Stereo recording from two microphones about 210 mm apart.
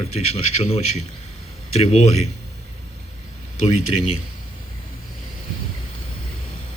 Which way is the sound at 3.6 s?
30° left (ahead or behind).